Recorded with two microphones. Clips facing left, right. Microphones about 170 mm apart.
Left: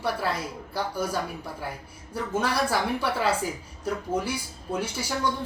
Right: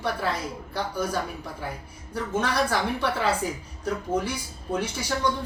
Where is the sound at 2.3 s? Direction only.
5° left (ahead or behind).